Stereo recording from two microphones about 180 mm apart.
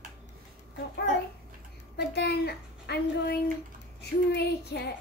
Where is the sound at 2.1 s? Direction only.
65° left (ahead or behind).